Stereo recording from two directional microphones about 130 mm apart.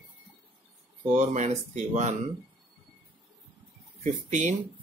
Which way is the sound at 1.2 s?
65° right (ahead or behind).